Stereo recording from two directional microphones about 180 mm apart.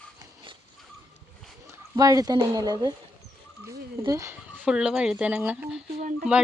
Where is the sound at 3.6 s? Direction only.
15° right (ahead or behind).